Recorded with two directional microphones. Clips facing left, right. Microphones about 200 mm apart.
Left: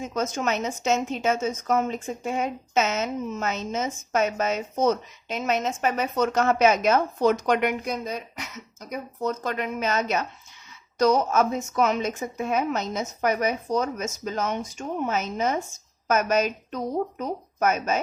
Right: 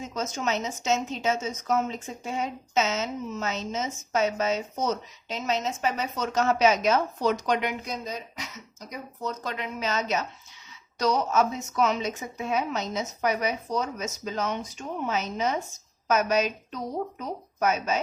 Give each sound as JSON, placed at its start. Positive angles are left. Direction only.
{"t": 0.0, "sound": "a woman's voice", "side_deg": 55}